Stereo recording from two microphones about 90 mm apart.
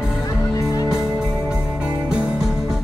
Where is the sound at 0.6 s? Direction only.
35° left (ahead or behind).